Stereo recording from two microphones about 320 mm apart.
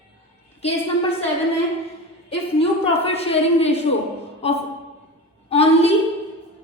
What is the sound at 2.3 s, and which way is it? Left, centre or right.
A woman's voice, centre.